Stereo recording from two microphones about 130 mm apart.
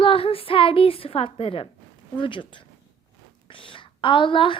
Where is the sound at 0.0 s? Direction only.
45° left (ahead or behind).